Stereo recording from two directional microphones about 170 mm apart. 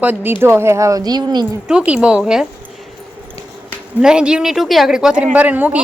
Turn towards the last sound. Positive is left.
turn(degrees=-10)  # may be behind; listen again after turning